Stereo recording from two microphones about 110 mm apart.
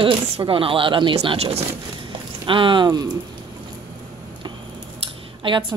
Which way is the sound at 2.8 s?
35° right (ahead or behind).